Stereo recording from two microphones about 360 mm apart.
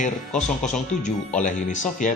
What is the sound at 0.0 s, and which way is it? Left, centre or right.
Speech, centre.